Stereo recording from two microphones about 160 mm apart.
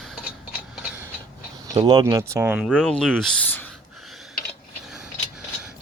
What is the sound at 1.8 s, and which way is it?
Speech, 25° right (ahead or behind).